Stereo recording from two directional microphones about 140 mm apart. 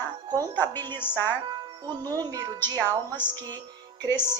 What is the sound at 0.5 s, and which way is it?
Speech, 15° left (ahead or behind).